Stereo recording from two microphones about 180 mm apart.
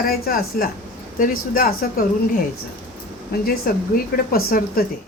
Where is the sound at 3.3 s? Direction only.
60° left (ahead or behind).